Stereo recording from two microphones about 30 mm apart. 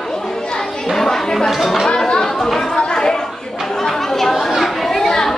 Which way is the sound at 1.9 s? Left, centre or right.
Left.